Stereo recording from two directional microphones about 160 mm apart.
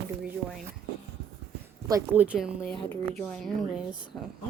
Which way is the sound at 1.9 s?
15° right (ahead or behind).